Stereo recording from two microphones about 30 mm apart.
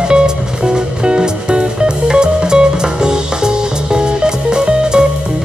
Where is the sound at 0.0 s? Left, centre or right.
Right.